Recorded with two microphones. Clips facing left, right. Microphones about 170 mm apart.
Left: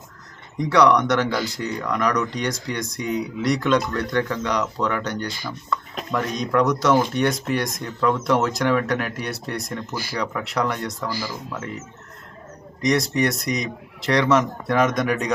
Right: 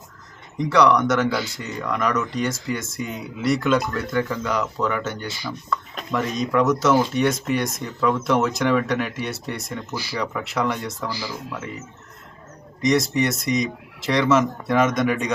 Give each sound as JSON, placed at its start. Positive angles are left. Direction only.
{"t": 0.6, "sound": "speech", "side_deg": 0}
{"t": 9.9, "sound": "speech", "side_deg": 50}
{"t": 10.2, "sound": "speech", "side_deg": 0}
{"t": 11.1, "sound": "speech", "side_deg": 45}
{"t": 12.8, "sound": "speech", "side_deg": 0}